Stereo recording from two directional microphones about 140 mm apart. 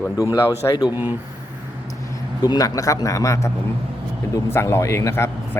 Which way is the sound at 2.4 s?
25° left (ahead or behind).